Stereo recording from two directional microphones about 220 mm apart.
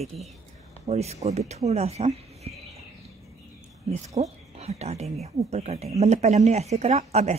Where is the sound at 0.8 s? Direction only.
30° right (ahead or behind).